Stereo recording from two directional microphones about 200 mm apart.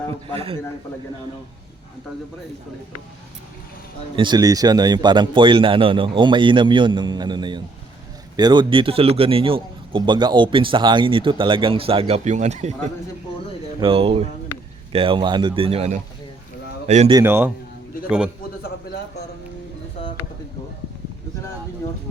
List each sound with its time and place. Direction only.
0.3 s a man's voice: 30° right (ahead or behind)
4.1 s a man's voice: 25° right (ahead or behind)
13.8 s a man's voice: 30° right (ahead or behind)
17.1 s a man's voice: 15° right (ahead or behind)